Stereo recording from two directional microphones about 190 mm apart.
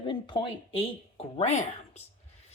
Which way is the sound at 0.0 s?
25° left (ahead or behind).